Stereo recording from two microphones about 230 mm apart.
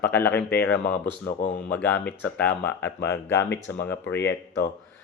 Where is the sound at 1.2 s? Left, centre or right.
Left.